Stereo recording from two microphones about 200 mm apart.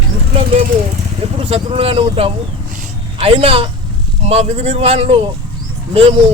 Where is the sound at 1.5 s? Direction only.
30° right (ahead or behind).